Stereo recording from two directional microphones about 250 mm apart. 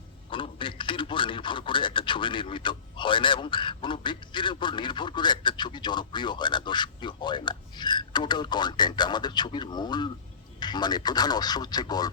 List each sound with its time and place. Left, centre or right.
0.3 s a man's voice: left